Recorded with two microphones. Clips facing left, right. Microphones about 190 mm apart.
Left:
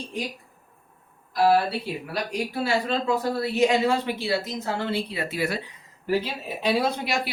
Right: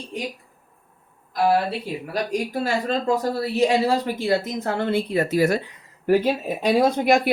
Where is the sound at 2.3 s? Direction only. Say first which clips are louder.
Right 1 dB; 45° right (ahead or behind).